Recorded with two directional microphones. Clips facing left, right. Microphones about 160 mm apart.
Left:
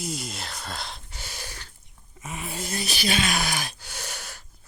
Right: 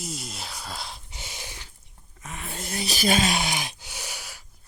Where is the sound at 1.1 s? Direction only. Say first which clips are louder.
Left 1 dB; 20° right (ahead or behind).